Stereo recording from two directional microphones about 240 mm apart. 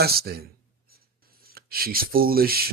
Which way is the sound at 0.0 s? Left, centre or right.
Right.